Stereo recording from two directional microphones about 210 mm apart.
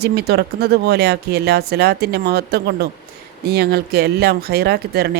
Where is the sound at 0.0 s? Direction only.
50° right (ahead or behind).